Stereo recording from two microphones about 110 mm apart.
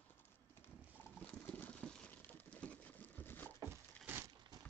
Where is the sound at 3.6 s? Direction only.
25° right (ahead or behind).